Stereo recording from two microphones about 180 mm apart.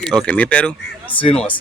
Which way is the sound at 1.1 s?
30° left (ahead or behind).